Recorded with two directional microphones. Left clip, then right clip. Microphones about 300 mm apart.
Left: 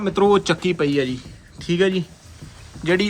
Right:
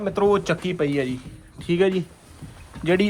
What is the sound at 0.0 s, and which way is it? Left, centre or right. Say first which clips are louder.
Speech: left 3 dB; centre.